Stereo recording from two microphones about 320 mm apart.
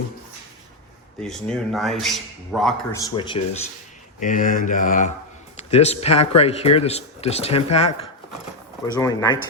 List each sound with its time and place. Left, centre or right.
1.2 s speech: centre
3.0 s speech: centre
8.9 s speech: centre